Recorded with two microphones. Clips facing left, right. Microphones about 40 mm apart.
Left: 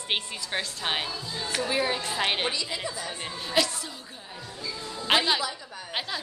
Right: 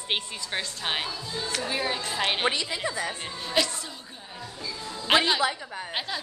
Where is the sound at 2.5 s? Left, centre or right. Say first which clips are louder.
Right 3 dB; right.